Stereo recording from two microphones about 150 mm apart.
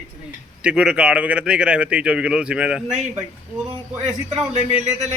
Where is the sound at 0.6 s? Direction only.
5° right (ahead or behind).